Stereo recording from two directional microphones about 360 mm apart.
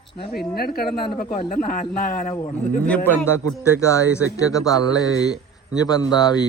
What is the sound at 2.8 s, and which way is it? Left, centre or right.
Speech, centre.